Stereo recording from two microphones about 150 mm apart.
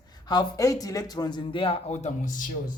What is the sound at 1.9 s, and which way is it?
Speech, 50° left (ahead or behind).